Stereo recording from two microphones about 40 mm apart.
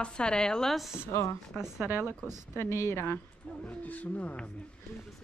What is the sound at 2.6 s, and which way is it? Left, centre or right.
Speech, left.